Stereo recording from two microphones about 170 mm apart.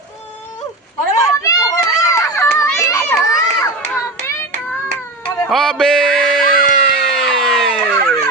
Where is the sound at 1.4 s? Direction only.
20° left (ahead or behind).